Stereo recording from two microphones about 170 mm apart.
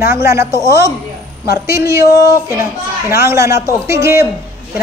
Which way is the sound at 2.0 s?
65° left (ahead or behind).